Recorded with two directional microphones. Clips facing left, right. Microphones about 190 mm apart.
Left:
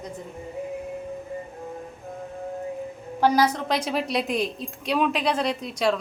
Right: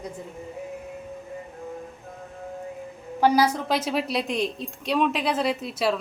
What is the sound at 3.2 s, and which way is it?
Speech, 10° right (ahead or behind).